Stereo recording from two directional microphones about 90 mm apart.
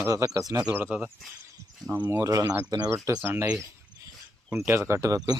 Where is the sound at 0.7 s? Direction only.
20° right (ahead or behind).